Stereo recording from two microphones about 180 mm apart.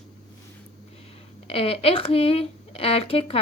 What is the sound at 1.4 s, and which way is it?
A woman's voice, 35° left (ahead or behind).